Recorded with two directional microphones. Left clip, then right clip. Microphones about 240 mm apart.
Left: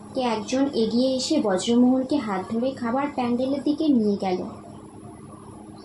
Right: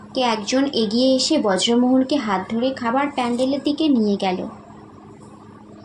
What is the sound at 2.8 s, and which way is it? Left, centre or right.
A woman's voice, right.